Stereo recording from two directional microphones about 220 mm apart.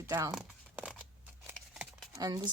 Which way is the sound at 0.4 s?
Centre (ahead or behind).